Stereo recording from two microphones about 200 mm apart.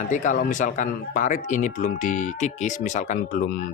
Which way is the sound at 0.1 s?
40° left (ahead or behind).